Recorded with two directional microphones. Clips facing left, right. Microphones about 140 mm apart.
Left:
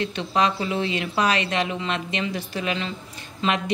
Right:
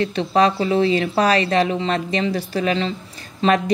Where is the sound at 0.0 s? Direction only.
35° right (ahead or behind).